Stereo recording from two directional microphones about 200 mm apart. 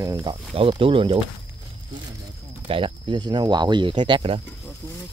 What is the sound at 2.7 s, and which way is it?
Speech, 25° right (ahead or behind).